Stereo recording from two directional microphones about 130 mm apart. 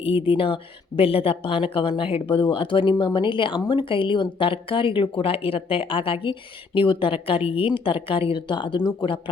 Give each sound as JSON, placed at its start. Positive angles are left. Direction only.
{"t": 0.3, "sound": "speech", "side_deg": 45}